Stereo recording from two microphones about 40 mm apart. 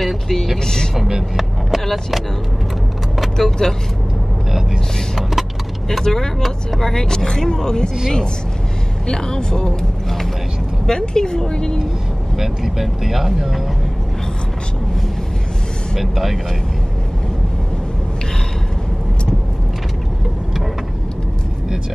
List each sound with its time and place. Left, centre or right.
0.0 s vehicle: centre
0.9 s vehicle: centre
1.9 s speech: centre
3.3 s speech: centre
5.9 s speech: centre
9.0 s speech: centre
12.4 s speech: centre
16.0 s speech: centre